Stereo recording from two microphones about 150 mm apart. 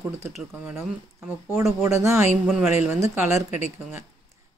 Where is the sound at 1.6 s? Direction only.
20° right (ahead or behind).